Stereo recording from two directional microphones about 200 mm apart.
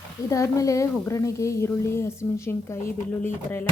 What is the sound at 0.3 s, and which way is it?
Speech, 15° left (ahead or behind).